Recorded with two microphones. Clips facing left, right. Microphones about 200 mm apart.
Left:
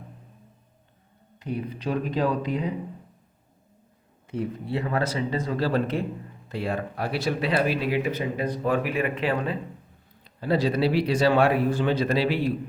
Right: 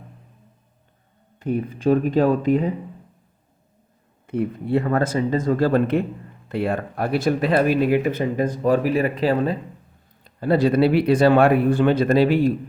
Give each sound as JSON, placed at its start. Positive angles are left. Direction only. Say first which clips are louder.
{"t": 1.4, "sound": "speech", "louder": "right 7 dB", "side_deg": -50}
{"t": 4.3, "sound": "speech", "louder": "right 7 dB", "side_deg": -55}
{"t": 10.2, "sound": "speech", "louder": "right 5 dB", "side_deg": -50}